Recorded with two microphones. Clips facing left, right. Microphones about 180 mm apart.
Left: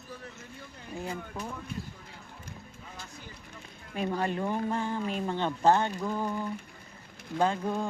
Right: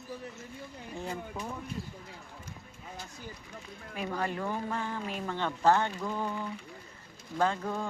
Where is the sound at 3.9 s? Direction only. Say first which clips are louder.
Left 3 dB; 25° left (ahead or behind).